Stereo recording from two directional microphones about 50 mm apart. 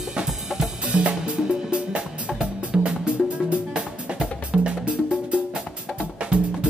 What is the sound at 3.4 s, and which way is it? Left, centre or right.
Music, right.